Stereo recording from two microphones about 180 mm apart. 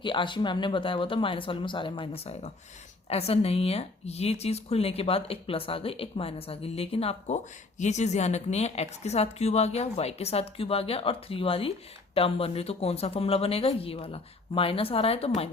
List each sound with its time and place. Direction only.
0.0 s speech: 25° left (ahead or behind)